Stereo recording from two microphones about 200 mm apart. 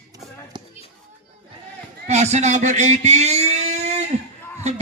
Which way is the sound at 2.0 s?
35° right (ahead or behind).